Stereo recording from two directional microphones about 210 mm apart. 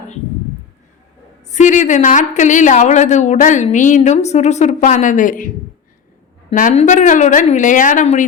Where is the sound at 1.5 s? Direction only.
35° left (ahead or behind).